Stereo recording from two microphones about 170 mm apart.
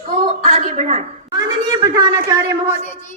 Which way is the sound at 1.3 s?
25° right (ahead or behind).